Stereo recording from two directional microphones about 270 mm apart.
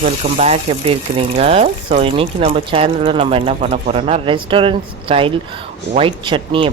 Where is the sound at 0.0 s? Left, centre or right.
Right.